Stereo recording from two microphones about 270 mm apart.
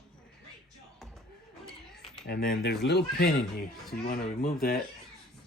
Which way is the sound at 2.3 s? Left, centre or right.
Left.